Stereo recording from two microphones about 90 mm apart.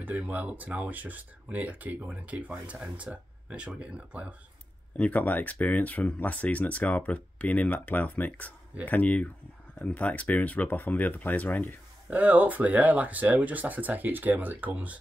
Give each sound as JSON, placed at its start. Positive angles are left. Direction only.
{"t": 0.0, "sound": "speech", "side_deg": -15}
{"t": 4.9, "sound": "speech", "side_deg": 15}
{"t": 12.1, "sound": "speech", "side_deg": -20}